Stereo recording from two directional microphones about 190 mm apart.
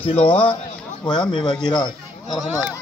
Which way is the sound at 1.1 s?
25° left (ahead or behind).